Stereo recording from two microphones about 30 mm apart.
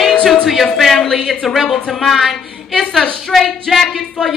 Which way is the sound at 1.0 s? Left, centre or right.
Centre.